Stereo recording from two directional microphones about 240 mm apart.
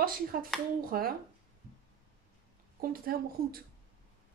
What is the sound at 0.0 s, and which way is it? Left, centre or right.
Speech, right.